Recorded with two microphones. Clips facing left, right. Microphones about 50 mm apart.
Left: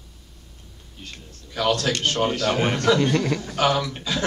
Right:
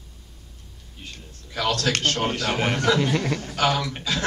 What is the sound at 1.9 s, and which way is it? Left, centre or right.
Speech, right.